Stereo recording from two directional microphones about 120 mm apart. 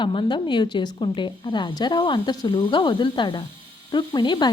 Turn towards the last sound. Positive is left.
turn(degrees=40)  # may be behind; listen again after turning